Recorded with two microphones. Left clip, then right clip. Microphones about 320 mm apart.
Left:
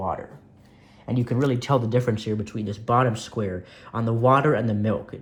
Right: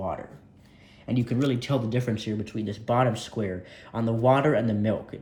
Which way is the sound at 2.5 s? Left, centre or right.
Left.